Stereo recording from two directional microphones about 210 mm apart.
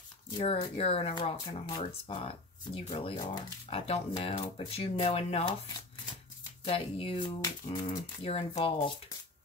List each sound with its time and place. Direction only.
0.4 s speech: 25° left (ahead or behind)
6.6 s speech: 25° left (ahead or behind)